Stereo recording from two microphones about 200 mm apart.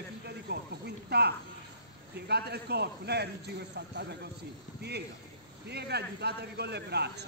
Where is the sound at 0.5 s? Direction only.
55° right (ahead or behind).